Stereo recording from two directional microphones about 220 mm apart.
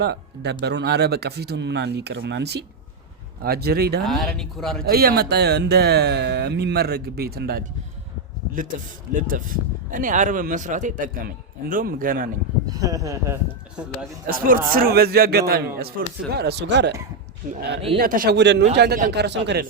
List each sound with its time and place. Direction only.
0.0 s speech: 45° right (ahead or behind)
4.0 s speech: centre (ahead or behind)
4.9 s speech: 45° right (ahead or behind)
9.1 s speech: 40° right (ahead or behind)
12.6 s speech: 15° right (ahead or behind)
14.3 s speech: 40° right (ahead or behind)
17.9 s speech: 40° right (ahead or behind)